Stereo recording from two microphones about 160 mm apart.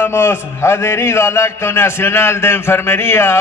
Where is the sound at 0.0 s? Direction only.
15° left (ahead or behind).